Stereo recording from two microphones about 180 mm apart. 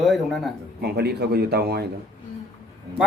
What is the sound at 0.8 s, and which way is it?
A man's voice, 65° right (ahead or behind).